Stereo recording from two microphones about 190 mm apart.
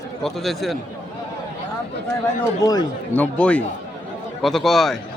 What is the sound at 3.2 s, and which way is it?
A man's voice, 5° left (ahead or behind).